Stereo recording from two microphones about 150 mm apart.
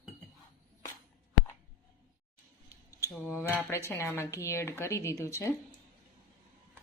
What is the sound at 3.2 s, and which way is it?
A woman's voice, 15° left (ahead or behind).